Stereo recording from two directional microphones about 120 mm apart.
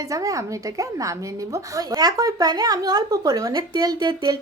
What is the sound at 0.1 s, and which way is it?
A woman's voice, 30° right (ahead or behind).